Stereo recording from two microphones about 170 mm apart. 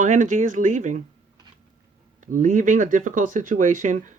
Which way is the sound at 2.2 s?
50° right (ahead or behind).